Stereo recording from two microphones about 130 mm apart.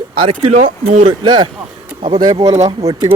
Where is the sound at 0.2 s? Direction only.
45° right (ahead or behind).